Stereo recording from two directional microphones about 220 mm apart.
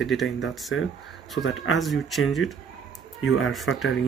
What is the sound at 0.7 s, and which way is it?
Speech, 65° left (ahead or behind).